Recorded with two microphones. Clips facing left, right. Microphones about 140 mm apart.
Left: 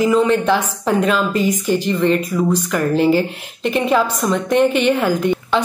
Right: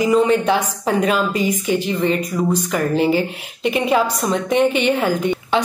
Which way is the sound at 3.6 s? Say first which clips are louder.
Left 1 dB; 5° right (ahead or behind).